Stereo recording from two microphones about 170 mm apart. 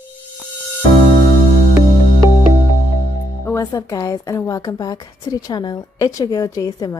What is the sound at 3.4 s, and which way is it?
A woman's voice, 15° left (ahead or behind).